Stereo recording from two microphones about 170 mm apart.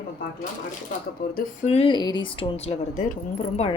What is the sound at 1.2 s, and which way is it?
Speech, 75° left (ahead or behind).